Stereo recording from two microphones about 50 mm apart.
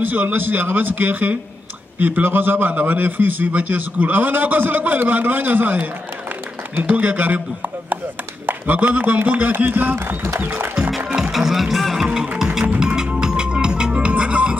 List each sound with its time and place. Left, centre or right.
0.0 s a man's voice: right
7.0 s a man's voice: right
8.5 s a man's voice: right
11.1 s music: centre
11.3 s music: centre; by 14.6 s right